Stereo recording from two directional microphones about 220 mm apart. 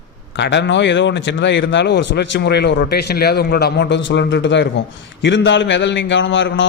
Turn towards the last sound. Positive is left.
turn(degrees=55)  # may be behind; listen again after turning